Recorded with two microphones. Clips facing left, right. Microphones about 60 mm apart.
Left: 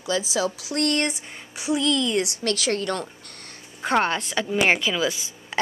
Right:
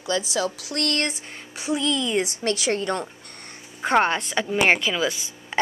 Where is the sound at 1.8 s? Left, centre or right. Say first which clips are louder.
Left 1 dB; centre.